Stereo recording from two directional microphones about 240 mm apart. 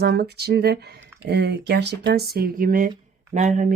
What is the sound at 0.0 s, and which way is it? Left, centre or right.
Speech, right.